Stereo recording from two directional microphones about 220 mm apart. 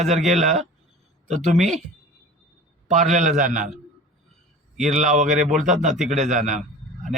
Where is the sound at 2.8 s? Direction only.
30° right (ahead or behind).